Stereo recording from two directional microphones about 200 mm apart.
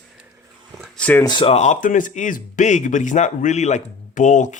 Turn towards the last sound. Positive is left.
turn(degrees=40)  # may be behind; listen again after turning